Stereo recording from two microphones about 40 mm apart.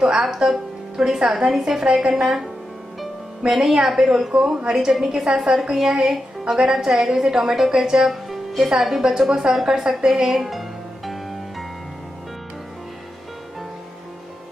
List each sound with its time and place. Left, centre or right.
0.0 s a woman's voice: centre